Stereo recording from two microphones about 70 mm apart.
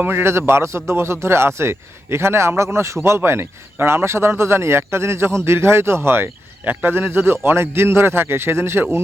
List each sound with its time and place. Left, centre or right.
0.0 s a man's voice: right